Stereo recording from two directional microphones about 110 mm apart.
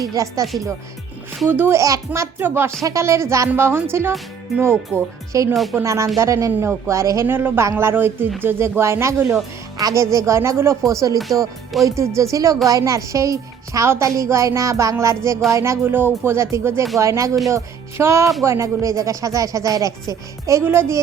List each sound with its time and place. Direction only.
0.0 s speech: 30° right (ahead or behind)
1.5 s a woman's voice: 20° right (ahead or behind)